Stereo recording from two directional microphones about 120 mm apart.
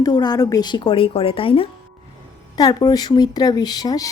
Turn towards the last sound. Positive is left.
turn(degrees=35)  # may be behind; listen again after turning